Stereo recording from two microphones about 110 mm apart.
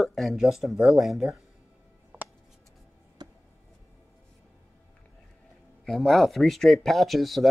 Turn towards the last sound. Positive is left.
turn(degrees=0)  # may be behind; listen again after turning